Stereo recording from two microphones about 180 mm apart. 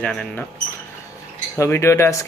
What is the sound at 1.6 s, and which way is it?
Speech, 15° left (ahead or behind).